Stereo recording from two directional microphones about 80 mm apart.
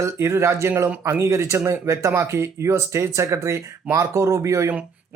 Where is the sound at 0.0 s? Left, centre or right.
Right.